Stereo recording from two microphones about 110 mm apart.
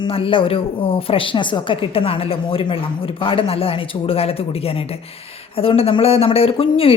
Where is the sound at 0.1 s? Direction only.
55° left (ahead or behind).